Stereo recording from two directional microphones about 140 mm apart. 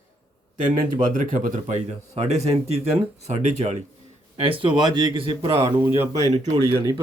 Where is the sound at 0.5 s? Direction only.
70° right (ahead or behind); by 3.8 s 50° right (ahead or behind).